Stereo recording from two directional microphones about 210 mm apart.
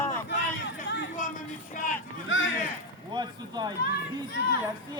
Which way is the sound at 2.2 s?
65° left (ahead or behind).